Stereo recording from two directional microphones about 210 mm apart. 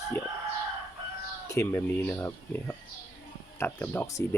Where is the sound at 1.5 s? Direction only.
10° left (ahead or behind).